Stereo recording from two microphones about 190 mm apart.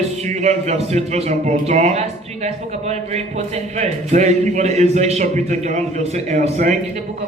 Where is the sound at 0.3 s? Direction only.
35° right (ahead or behind).